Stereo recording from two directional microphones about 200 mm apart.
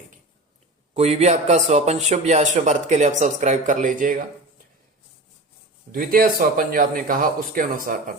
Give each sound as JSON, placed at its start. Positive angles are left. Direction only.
{"t": 0.9, "sound": "speech", "side_deg": -30}
{"t": 5.9, "sound": "a man's voice", "side_deg": -45}